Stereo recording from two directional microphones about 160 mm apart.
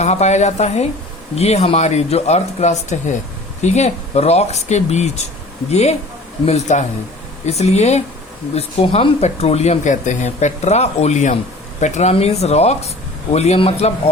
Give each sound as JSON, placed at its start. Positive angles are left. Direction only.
{"t": 0.0, "sound": "speech", "side_deg": 45}